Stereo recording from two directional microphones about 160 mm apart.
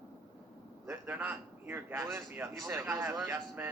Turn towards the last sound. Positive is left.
turn(degrees=-10)  # may be behind; listen again after turning